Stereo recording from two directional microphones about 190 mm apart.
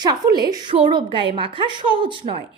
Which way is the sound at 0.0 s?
20° right (ahead or behind).